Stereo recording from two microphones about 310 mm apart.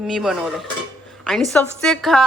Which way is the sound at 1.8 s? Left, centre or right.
Centre.